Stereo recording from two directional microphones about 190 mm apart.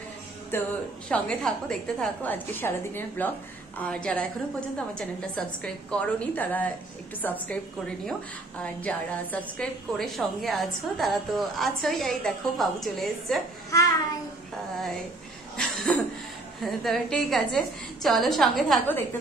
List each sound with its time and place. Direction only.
0.5 s a woman's voice: 10° left (ahead or behind)
13.7 s child singing: 15° left (ahead or behind)
15.5 s cough: 5° left (ahead or behind)
16.6 s a woman's voice: centre (ahead or behind)